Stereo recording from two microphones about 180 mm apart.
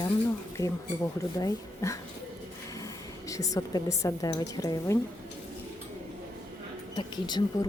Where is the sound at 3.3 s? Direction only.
20° left (ahead or behind).